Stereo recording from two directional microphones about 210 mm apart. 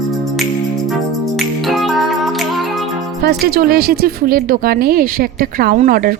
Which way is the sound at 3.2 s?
45° right (ahead or behind).